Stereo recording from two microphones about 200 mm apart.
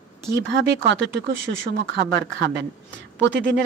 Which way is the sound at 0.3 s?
60° right (ahead or behind).